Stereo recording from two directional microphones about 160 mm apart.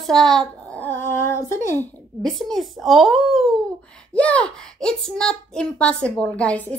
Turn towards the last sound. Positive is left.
turn(degrees=10)  # may be behind; listen again after turning